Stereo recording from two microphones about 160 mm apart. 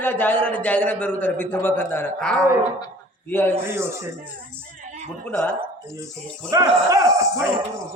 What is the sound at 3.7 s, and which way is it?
Speech, 15° right (ahead or behind).